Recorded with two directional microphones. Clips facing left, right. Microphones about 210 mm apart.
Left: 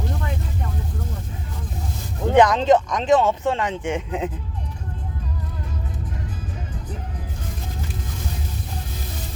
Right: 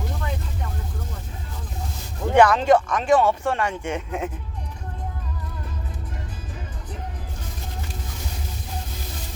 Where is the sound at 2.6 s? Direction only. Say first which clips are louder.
Left 1 dB; 10° right (ahead or behind).